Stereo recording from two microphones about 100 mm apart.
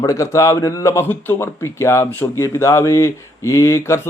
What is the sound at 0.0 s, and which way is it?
Speech, 30° left (ahead or behind).